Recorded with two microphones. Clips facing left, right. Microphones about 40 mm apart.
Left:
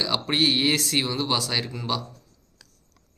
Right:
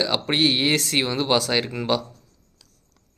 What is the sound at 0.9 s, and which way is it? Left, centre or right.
Speech, right.